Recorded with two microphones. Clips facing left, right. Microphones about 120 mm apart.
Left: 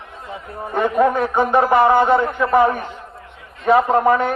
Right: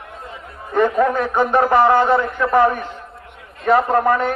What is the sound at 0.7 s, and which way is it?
A man's voice, 15° left (ahead or behind).